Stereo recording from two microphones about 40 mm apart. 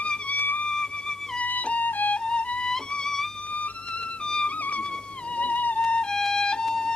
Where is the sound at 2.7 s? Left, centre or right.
Centre.